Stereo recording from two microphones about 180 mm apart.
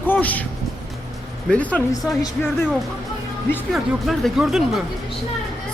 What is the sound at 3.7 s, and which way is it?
Speech, centre (ahead or behind).